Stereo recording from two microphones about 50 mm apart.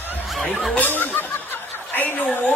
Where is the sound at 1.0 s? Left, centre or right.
Left.